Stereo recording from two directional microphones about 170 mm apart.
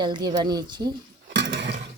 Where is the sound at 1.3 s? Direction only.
90° right.